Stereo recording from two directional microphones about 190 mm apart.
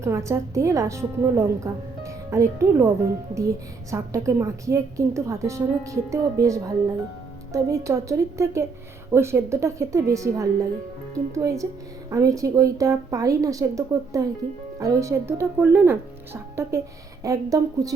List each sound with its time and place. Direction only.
0.0 s a woman's voice: 15° right (ahead or behind)
3.9 s a woman's voice: 15° right (ahead or behind)